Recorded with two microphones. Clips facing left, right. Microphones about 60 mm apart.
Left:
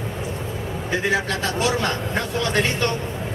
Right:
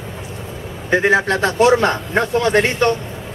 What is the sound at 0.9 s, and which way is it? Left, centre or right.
A man's voice, right.